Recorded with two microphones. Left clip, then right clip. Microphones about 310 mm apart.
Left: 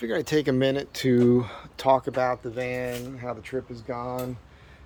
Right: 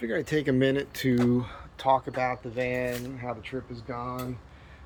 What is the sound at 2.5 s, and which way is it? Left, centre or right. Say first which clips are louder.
Speech: even; centre.